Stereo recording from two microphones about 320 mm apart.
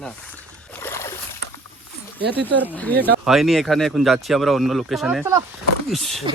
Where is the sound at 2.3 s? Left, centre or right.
Centre.